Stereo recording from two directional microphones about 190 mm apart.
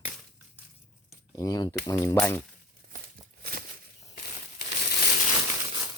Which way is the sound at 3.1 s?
50° right (ahead or behind).